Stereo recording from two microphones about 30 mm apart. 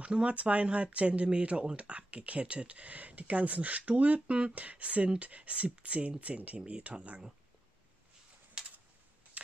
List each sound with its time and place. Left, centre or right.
0.0 s speech: right
0.3 s speech: right